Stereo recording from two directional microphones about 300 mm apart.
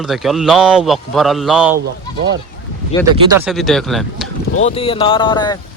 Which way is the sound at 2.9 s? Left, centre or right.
Centre.